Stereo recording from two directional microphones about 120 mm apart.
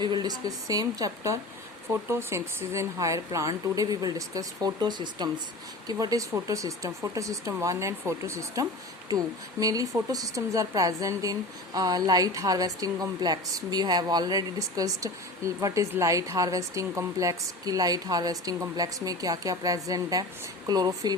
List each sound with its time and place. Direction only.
0.0 s speech: 35° right (ahead or behind)